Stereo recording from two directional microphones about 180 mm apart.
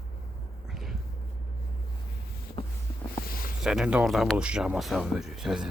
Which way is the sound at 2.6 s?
30° left (ahead or behind).